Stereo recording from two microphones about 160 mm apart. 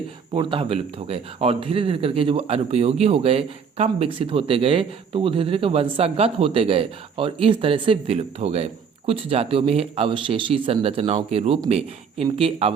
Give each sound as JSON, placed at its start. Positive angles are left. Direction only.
{"t": 0.3, "sound": "a man's voice", "side_deg": -35}